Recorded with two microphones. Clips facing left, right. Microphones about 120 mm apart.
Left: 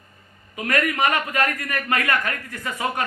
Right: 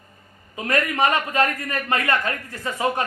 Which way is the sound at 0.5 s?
30° right (ahead or behind).